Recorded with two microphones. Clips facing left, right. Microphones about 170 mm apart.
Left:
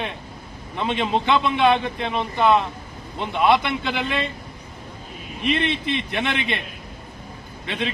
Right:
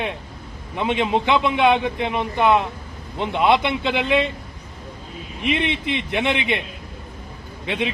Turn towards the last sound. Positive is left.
turn(degrees=-15)  # may be behind; listen again after turning